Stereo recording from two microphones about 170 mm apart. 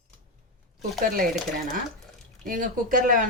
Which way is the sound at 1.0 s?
55° right (ahead or behind).